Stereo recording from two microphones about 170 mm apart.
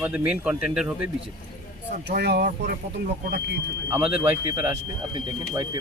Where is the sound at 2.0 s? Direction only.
70° right (ahead or behind).